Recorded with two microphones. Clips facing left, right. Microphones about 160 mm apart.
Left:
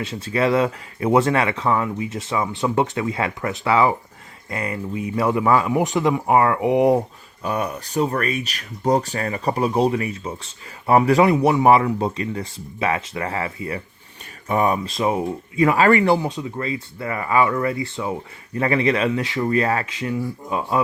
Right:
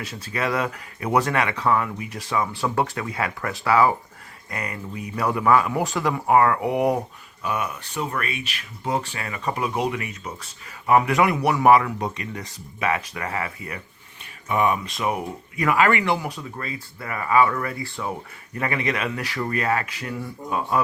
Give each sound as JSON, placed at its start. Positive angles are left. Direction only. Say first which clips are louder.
{"t": 0.0, "sound": "speech", "louder": "left 6 dB", "side_deg": 25}
{"t": 7.4, "sound": "speech", "louder": "left 3 dB", "side_deg": 35}